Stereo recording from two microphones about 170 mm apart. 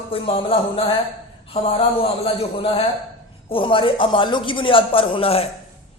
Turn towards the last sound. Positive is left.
turn(degrees=35)  # may be behind; listen again after turning